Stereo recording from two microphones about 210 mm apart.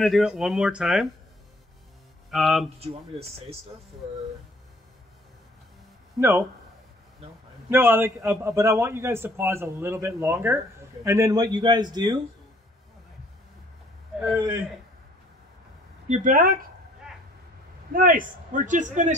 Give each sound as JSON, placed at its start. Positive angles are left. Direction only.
{"t": 0.0, "sound": "speech", "side_deg": 0}
{"t": 2.3, "sound": "speech", "side_deg": 0}
{"t": 2.8, "sound": "speech", "side_deg": -30}
{"t": 6.1, "sound": "speech", "side_deg": -10}
{"t": 7.7, "sound": "a man's voice", "side_deg": -10}
{"t": 14.2, "sound": "a man's voice", "side_deg": -15}
{"t": 16.1, "sound": "a man's voice", "side_deg": -40}
{"t": 17.9, "sound": "a man's voice", "side_deg": -40}